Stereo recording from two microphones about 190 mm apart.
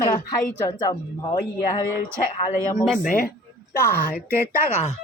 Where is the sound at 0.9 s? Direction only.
20° left (ahead or behind).